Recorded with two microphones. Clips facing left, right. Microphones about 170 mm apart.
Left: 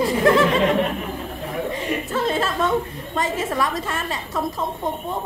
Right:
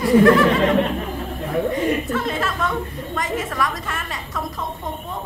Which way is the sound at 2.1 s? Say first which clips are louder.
Left 2 dB; 30° left (ahead or behind).